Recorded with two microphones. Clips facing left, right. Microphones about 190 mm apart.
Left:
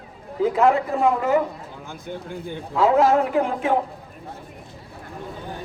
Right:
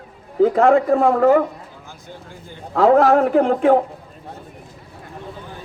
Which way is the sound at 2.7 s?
55° right (ahead or behind).